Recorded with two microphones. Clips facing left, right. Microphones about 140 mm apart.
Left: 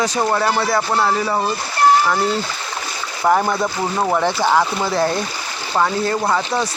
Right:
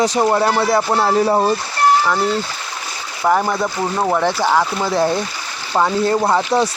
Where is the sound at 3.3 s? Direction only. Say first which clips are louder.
Even; 5° left (ahead or behind).